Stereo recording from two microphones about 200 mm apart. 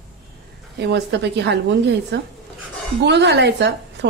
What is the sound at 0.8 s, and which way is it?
A woman's voice, 60° right (ahead or behind).